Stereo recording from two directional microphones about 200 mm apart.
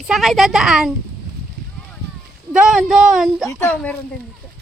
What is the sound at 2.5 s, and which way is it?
Speech, centre (ahead or behind).